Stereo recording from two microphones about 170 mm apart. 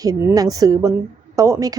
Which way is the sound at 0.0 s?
20° right (ahead or behind).